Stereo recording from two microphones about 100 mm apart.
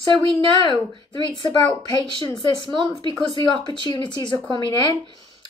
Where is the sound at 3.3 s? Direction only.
50° left (ahead or behind).